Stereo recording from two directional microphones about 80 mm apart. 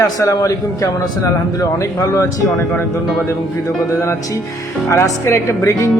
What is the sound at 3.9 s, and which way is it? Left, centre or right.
Speech, left.